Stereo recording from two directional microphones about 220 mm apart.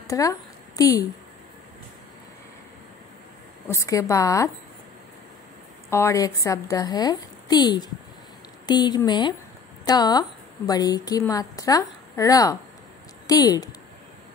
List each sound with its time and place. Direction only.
0.1 s a woman's voice: 15° left (ahead or behind)
3.6 s a woman's voice: 15° left (ahead or behind)
5.9 s a woman's voice: 10° left (ahead or behind)